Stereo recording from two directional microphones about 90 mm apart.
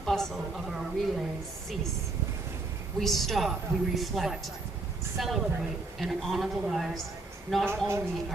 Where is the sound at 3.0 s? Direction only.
5° left (ahead or behind).